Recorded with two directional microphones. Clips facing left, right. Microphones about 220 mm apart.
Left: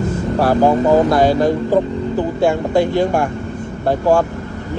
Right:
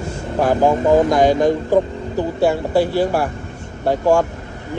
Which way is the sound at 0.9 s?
15° right (ahead or behind).